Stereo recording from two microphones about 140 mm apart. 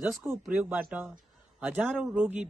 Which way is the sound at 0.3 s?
10° right (ahead or behind).